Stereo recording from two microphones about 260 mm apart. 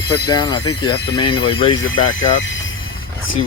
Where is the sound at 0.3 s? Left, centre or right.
Centre.